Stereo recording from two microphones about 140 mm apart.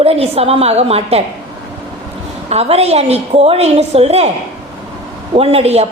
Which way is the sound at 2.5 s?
50° right (ahead or behind).